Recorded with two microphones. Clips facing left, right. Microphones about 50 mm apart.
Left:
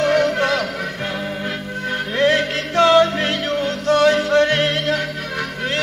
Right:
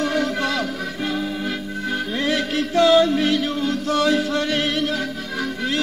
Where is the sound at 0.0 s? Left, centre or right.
Left.